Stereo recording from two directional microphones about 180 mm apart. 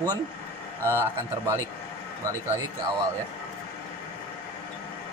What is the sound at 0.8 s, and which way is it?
Speech, 15° right (ahead or behind).